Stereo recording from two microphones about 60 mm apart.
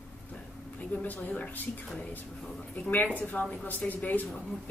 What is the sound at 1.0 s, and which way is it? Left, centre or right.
Speech, left.